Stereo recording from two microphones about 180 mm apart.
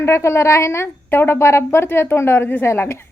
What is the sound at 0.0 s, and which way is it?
A woman's voice, 15° left (ahead or behind).